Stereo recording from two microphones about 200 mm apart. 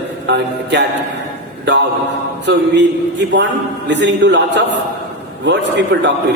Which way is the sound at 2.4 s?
60° right (ahead or behind).